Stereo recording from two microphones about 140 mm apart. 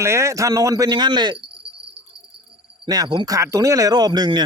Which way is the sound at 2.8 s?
30° right (ahead or behind).